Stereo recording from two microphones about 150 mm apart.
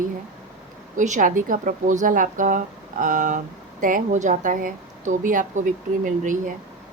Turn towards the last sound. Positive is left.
turn(degrees=-60)  # may be behind; listen again after turning